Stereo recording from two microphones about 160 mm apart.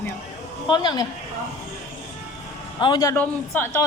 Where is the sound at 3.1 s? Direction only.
15° left (ahead or behind).